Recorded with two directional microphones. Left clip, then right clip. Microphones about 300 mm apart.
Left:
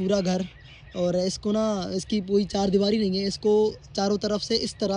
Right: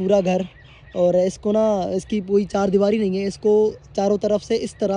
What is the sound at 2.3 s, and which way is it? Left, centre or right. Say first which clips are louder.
Speech: right 5 dB; centre.